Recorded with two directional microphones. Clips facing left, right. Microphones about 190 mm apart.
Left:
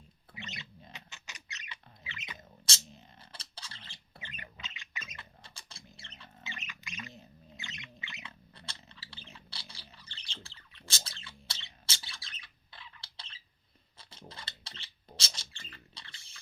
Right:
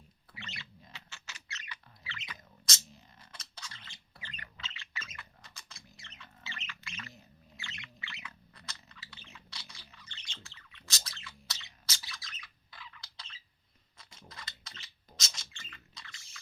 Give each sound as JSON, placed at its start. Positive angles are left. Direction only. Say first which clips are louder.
{"t": 0.3, "sound": "a sound", "louder": "left 3 dB", "side_deg": 20}
{"t": 4.2, "sound": "squawk", "louder": "left 1 dB", "side_deg": 20}
{"t": 5.1, "sound": "rodents", "louder": "left 1 dB", "side_deg": 30}
{"t": 6.4, "sound": "squawk", "louder": "left 1 dB", "side_deg": 15}
{"t": 8.5, "sound": "bird", "louder": "left 1 dB", "side_deg": 30}
{"t": 14.0, "sound": "a sound", "louder": "left 2 dB", "side_deg": 30}